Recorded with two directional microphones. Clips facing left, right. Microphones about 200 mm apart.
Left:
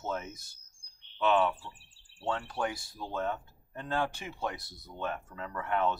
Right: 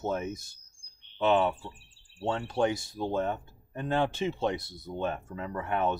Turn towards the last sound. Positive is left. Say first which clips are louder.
# right 2 dB
turn(degrees=-20)  # may be behind; listen again after turning